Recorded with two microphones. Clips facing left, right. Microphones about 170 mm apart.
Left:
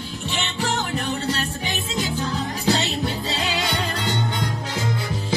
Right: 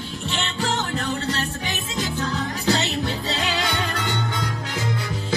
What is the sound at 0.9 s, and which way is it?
Music, 20° left (ahead or behind).